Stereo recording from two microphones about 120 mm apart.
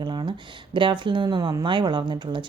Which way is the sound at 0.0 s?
40° right (ahead or behind).